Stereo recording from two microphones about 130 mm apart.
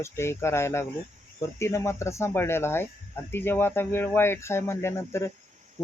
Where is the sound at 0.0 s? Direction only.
20° left (ahead or behind).